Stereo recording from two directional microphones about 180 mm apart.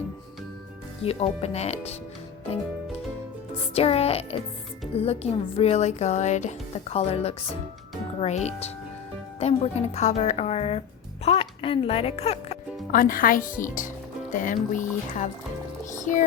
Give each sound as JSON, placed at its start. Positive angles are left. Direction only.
{"t": 1.0, "sound": "speech", "side_deg": 35}
{"t": 3.8, "sound": "speech", "side_deg": 35}
{"t": 12.9, "sound": "speech", "side_deg": 50}